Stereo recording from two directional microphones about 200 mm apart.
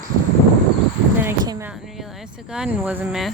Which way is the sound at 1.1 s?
10° right (ahead or behind).